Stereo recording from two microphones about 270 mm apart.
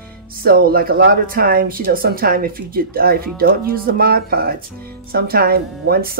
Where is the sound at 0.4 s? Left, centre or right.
Right.